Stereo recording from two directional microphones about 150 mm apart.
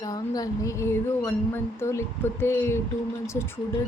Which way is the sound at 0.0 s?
25° left (ahead or behind).